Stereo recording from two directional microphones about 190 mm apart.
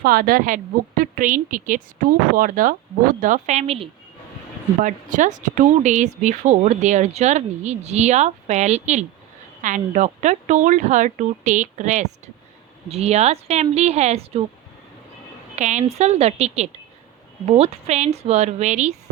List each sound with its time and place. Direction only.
0.0 s a woman's voice: 50° right (ahead or behind); by 14.4 s 35° right (ahead or behind)
15.5 s speech: 40° right (ahead or behind)